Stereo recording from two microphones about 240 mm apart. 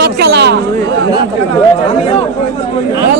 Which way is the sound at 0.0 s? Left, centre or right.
Right.